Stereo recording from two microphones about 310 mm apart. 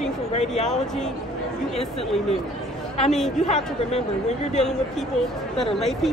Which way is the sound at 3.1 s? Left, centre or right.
Centre.